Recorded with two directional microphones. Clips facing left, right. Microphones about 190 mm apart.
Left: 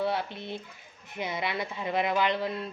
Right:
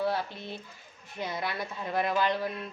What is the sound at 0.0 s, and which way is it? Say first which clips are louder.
A woman's voice: left 1 dB; 20° left (ahead or behind).